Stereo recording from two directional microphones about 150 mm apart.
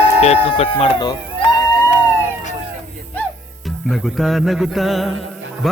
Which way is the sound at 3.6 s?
Centre (ahead or behind).